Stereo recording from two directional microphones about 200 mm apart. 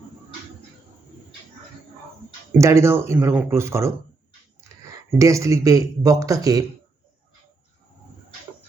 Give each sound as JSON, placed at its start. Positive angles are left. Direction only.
{"t": 2.5, "sound": "speech", "side_deg": -15}